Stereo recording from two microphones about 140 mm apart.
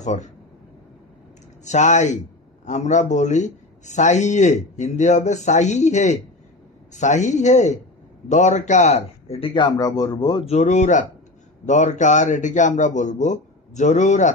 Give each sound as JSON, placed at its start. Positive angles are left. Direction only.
{"t": 0.0, "sound": "speech", "side_deg": 60}
{"t": 1.6, "sound": "a man's voice", "side_deg": 55}
{"t": 10.4, "sound": "a man's voice", "side_deg": 55}